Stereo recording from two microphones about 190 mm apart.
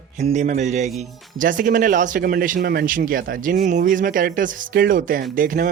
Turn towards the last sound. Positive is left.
turn(degrees=-45)  # may be behind; listen again after turning